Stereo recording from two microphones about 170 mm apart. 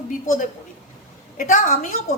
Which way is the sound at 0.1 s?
50° left (ahead or behind).